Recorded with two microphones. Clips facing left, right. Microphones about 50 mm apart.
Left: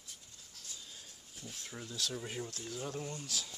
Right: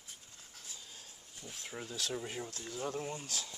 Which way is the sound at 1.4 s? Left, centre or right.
Centre.